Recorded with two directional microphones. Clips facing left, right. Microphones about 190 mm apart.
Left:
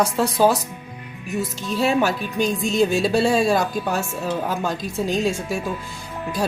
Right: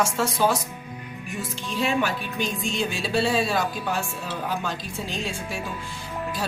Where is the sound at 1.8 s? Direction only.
40° left (ahead or behind).